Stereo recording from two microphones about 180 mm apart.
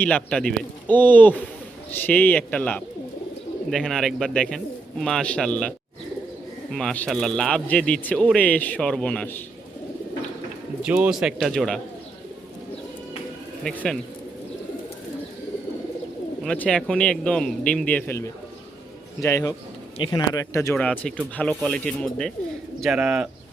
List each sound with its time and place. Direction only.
0.0 s speech: 5° left (ahead or behind)
10.8 s speech: 5° right (ahead or behind)
13.7 s speech: 5° left (ahead or behind)
16.4 s speech: 5° left (ahead or behind)